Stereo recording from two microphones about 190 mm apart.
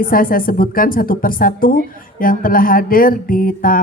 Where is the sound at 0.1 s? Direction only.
45° left (ahead or behind).